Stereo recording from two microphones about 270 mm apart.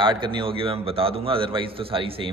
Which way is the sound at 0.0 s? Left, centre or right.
Centre.